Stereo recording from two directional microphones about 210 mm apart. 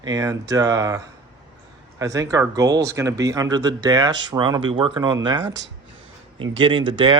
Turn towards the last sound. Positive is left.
turn(degrees=-25)  # may be behind; listen again after turning